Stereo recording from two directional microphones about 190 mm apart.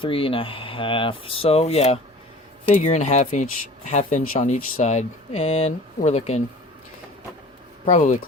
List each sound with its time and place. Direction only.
0.0 s speech: 30° left (ahead or behind)
7.9 s speech: 40° left (ahead or behind)